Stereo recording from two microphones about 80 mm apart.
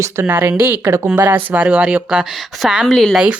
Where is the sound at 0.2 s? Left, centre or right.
Right.